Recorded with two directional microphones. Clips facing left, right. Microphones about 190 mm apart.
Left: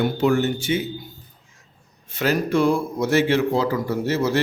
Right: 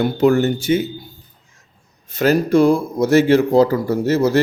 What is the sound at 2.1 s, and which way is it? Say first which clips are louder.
Speech: right 6 dB; 40° right (ahead or behind).